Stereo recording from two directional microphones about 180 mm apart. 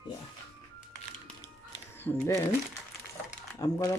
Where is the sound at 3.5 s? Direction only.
20° left (ahead or behind).